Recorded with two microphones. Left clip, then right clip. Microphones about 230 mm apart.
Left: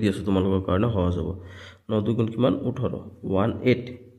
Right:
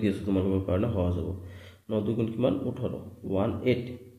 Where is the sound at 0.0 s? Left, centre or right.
Left.